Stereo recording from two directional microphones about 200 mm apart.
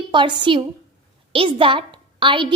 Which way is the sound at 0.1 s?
25° right (ahead or behind).